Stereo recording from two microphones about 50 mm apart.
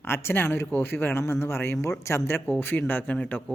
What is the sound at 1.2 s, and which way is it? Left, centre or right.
A man's voice, left.